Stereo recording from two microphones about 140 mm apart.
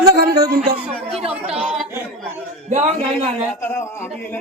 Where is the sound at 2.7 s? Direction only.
50° right (ahead or behind).